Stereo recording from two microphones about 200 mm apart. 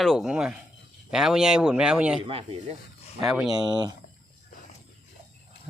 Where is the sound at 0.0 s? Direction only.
Centre (ahead or behind).